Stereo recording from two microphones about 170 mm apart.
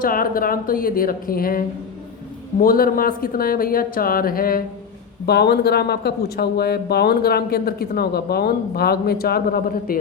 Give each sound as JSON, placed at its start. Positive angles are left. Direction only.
{"t": 0.0, "sound": "speech", "side_deg": 55}
{"t": 5.2, "sound": "speech", "side_deg": 70}